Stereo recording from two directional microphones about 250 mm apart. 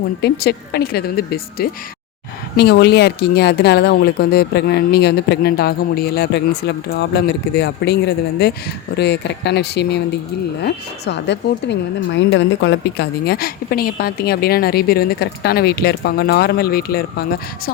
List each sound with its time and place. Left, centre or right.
0.2 s speech: left